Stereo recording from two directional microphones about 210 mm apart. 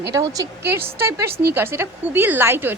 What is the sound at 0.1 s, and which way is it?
A woman's voice, 15° right (ahead or behind).